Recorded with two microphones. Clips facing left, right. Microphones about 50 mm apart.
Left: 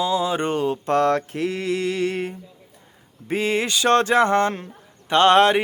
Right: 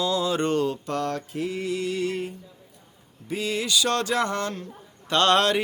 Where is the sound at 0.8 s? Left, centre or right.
Left.